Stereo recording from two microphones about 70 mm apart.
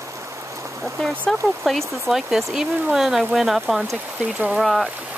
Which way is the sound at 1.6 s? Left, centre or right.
Centre.